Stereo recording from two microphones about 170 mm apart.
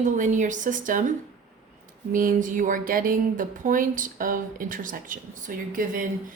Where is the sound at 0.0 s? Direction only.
45° right (ahead or behind).